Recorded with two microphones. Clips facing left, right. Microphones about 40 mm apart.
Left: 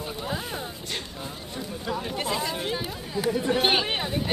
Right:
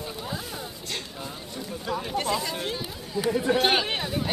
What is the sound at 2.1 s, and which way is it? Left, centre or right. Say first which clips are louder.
A woman's voice: right 2 dB; centre.